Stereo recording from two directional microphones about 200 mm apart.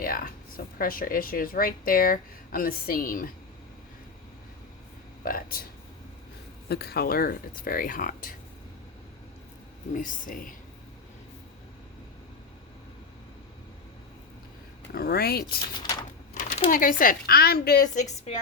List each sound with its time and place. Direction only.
0.0 s speech: 45° left (ahead or behind)
5.2 s speech: 45° left (ahead or behind)
6.7 s speech: 50° left (ahead or behind)
9.9 s speech: 40° left (ahead or behind)
14.9 s speech: 50° left (ahead or behind)
15.8 s a sound: 20° left (ahead or behind)
16.3 s a sound: 45° left (ahead or behind)
16.6 s speech: 40° left (ahead or behind)